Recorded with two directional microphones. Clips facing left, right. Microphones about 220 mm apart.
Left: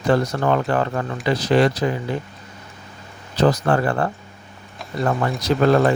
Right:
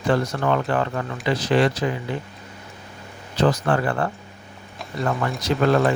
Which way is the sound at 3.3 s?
40° left (ahead or behind).